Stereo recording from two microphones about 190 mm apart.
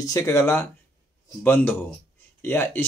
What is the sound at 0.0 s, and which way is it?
Speech, 15° left (ahead or behind).